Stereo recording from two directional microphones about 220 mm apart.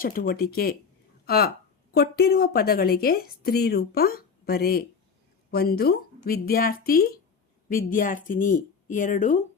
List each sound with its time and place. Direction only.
0.0 s a woman's voice: 40° left (ahead or behind)
1.9 s a woman's voice: 45° left (ahead or behind)